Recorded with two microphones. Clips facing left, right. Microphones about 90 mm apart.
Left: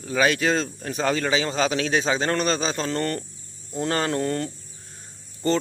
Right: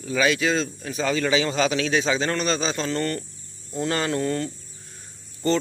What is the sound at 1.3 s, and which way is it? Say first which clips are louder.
Speech: right 1 dB; 30° left (ahead or behind).